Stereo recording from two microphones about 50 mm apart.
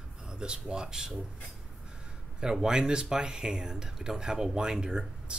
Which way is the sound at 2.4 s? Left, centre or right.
Centre.